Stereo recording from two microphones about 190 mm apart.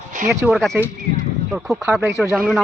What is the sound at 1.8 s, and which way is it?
Speech, 15° right (ahead or behind).